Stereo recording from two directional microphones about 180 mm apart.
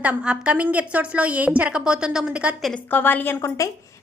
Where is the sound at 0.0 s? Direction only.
5° right (ahead or behind).